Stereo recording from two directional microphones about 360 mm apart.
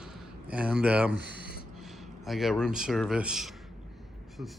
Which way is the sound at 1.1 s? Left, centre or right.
Right.